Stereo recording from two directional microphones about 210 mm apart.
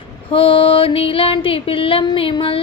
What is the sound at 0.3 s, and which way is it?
Music, 25° left (ahead or behind).